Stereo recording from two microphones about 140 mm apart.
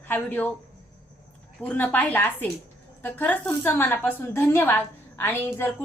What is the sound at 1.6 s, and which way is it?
A woman's voice, 10° left (ahead or behind).